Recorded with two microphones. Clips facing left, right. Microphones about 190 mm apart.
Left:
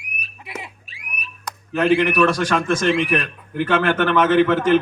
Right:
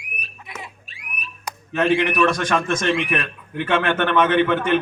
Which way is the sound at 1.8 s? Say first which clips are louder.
Left 2 dB; 35° left (ahead or behind).